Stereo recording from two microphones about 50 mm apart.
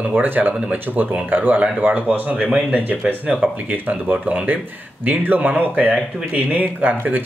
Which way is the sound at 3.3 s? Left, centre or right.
Centre.